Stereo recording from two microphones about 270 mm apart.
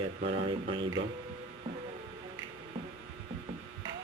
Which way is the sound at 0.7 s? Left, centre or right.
Centre.